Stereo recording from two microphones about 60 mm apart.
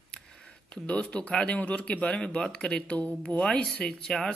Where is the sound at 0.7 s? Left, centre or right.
Centre.